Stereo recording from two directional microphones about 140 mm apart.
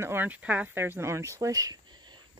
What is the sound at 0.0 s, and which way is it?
Speech, 15° right (ahead or behind).